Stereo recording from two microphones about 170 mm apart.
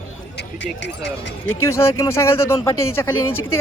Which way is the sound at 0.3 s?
90° left.